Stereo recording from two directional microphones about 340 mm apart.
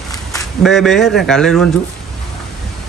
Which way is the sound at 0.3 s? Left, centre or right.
Centre.